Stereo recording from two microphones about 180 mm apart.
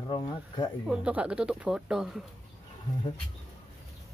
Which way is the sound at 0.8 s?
5° right (ahead or behind).